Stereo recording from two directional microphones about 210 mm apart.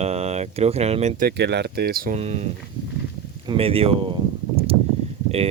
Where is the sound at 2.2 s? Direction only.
30° right (ahead or behind).